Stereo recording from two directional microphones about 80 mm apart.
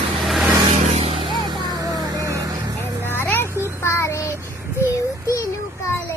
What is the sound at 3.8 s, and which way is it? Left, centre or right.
Child singing, left.